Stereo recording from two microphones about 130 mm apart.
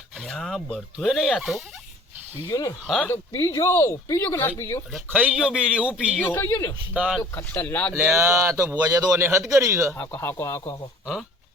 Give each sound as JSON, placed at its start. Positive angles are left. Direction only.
{"t": 0.3, "sound": "speech", "side_deg": 5}
{"t": 2.5, "sound": "speech", "side_deg": 25}
{"t": 2.8, "sound": "speech", "side_deg": 5}
{"t": 3.1, "sound": "speech", "side_deg": 20}
{"t": 4.9, "sound": "a man's voice", "side_deg": -5}
{"t": 6.1, "sound": "a man's voice", "side_deg": 15}
{"t": 6.9, "sound": "a man's voice", "side_deg": -10}
{"t": 7.3, "sound": "a man's voice", "side_deg": 20}
{"t": 7.9, "sound": "speech", "side_deg": -20}
{"t": 10.0, "sound": "a man's voice", "side_deg": 15}